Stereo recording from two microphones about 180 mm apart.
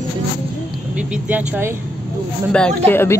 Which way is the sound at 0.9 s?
10° right (ahead or behind).